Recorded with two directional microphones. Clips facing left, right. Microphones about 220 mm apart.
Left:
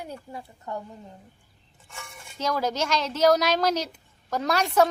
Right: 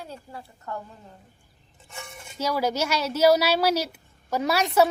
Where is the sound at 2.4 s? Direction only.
10° right (ahead or behind).